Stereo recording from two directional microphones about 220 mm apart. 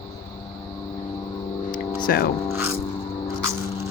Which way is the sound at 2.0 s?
45° left (ahead or behind).